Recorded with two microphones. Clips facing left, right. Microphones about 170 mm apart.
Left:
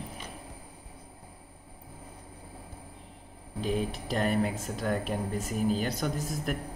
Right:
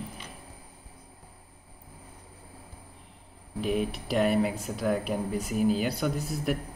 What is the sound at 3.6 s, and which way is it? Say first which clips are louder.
Speech: right 2 dB; 35° left (ahead or behind).